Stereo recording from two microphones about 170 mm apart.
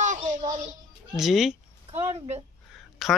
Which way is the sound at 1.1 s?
Centre (ahead or behind).